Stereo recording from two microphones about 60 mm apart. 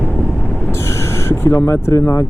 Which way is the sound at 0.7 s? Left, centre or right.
Left.